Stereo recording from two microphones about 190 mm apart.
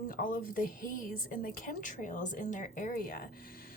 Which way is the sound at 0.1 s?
45° left (ahead or behind).